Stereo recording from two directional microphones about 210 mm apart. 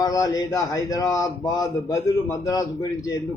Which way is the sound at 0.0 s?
15° left (ahead or behind).